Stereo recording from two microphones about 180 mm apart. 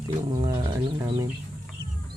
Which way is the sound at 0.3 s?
25° right (ahead or behind).